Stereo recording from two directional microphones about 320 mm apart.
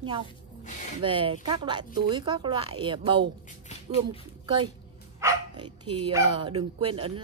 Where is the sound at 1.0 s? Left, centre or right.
Centre.